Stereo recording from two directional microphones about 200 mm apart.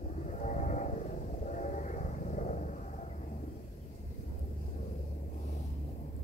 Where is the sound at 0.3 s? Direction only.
35° left (ahead or behind).